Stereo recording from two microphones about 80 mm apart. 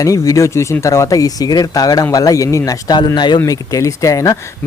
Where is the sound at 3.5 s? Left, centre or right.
Left.